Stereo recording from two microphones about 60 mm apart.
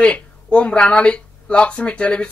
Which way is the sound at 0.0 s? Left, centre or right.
Centre.